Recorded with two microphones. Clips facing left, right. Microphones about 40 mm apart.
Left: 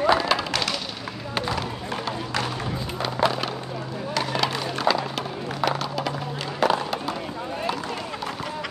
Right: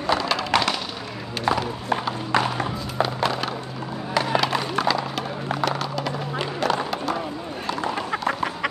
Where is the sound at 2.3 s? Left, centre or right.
Centre.